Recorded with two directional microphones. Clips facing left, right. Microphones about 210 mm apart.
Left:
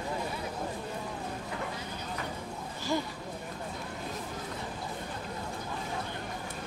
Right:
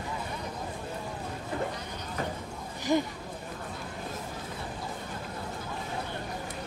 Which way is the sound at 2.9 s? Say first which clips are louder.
Right 5 dB; 15° right (ahead or behind).